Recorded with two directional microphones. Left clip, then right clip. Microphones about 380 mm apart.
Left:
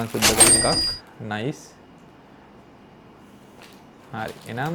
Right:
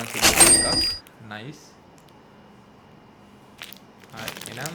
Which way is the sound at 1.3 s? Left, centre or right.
Left.